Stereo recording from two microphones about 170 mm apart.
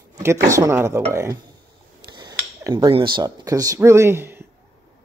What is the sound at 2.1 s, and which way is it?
Cutlery, 25° right (ahead or behind).